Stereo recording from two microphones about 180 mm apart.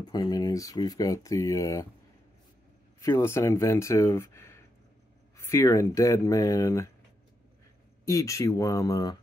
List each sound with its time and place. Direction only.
0.0 s speech: 25° left (ahead or behind)
3.0 s speech: 15° left (ahead or behind)
8.0 s speech: 15° left (ahead or behind)